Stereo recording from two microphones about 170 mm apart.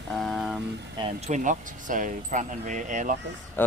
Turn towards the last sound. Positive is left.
turn(degrees=10)  # may be behind; listen again after turning